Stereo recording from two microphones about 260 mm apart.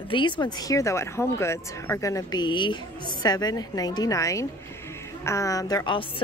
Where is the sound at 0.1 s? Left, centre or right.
Centre.